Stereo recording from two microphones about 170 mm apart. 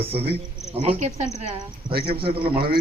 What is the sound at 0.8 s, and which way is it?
Speech, 40° right (ahead or behind).